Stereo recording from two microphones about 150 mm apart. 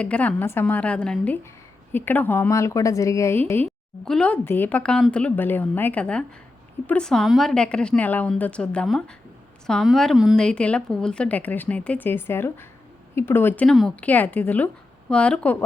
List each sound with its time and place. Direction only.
0.0 s a woman's voice: 10° left (ahead or behind)
13.7 s speech: 5° left (ahead or behind)